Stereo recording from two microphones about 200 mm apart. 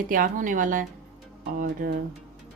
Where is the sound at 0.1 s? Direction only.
40° right (ahead or behind).